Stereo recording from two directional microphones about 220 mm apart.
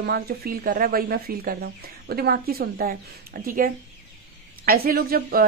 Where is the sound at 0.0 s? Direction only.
45° right (ahead or behind).